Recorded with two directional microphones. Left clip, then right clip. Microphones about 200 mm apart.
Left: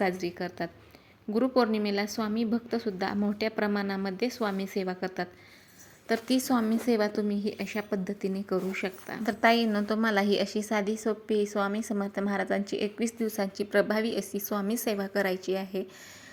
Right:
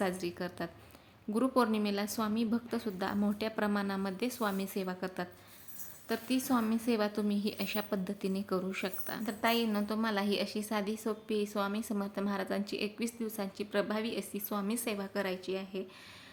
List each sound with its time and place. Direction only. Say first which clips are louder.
0.0 s a woman's voice: left 5 dB; 10° left (ahead or behind)
6.2 s a woman's voice: left 3 dB; 25° left (ahead or behind); by 9.2 s 10° left (ahead or behind)
9.2 s a woman's voice: left 8 dB; 25° left (ahead or behind)